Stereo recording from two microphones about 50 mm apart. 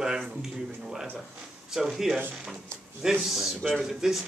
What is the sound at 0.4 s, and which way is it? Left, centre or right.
Speech, centre.